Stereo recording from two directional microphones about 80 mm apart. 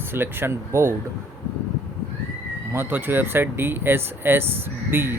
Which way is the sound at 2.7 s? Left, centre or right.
Right.